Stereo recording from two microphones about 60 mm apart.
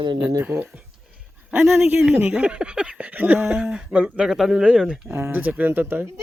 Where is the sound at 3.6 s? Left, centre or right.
Centre.